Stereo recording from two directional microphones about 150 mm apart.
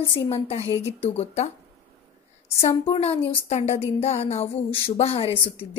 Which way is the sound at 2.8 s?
40° left (ahead or behind).